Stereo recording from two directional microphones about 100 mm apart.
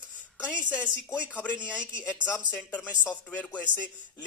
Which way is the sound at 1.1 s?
15° left (ahead or behind).